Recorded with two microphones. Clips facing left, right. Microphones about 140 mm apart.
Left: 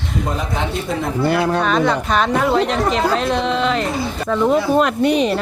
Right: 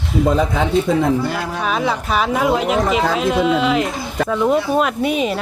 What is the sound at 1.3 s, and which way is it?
Speech, 70° left (ahead or behind).